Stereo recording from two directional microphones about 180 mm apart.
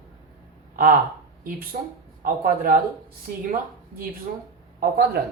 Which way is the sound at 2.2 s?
50° right (ahead or behind).